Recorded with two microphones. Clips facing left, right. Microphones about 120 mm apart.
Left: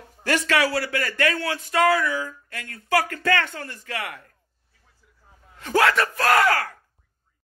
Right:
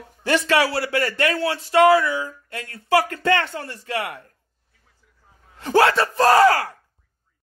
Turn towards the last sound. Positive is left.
turn(degrees=-30)  # may be behind; listen again after turning